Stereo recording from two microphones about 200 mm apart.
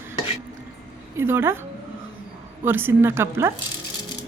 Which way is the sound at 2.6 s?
10° right (ahead or behind).